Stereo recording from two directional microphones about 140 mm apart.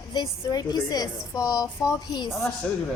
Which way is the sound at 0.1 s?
30° left (ahead or behind).